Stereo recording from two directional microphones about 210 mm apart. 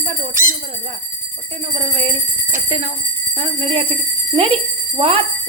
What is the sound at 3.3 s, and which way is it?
Speech, 25° right (ahead or behind).